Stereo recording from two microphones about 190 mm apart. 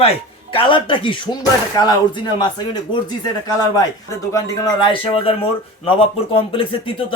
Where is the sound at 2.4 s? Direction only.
25° left (ahead or behind).